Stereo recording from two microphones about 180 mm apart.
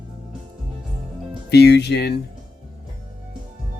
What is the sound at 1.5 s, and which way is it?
Speech, 65° left (ahead or behind).